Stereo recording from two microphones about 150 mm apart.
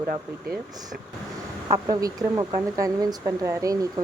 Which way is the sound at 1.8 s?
25° right (ahead or behind).